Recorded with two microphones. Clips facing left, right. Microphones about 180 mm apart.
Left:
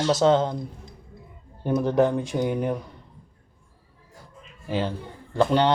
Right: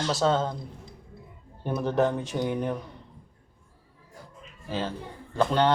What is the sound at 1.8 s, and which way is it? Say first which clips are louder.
Speech: left 2 dB; 15° left (ahead or behind).